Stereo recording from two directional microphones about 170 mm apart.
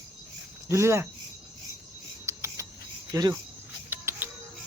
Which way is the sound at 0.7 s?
15° right (ahead or behind).